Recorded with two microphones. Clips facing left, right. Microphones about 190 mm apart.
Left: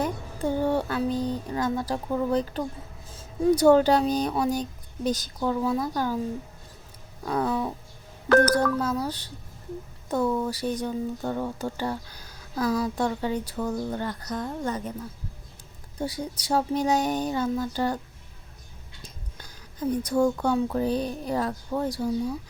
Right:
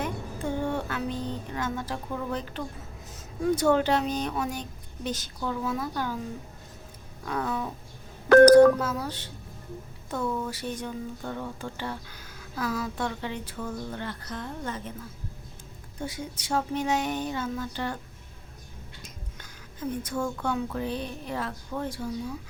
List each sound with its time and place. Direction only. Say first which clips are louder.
0.0 s speech: left 4 dB; 35° left (ahead or behind)
7.3 s speech: left 4 dB; 35° left (ahead or behind)
16.0 s speech: left 4 dB; 35° left (ahead or behind)
19.0 s speech: even; 35° left (ahead or behind)